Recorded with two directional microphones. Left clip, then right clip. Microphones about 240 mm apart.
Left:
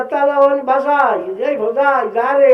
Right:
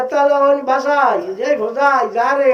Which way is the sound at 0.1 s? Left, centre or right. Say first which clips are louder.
Left 1 dB; centre.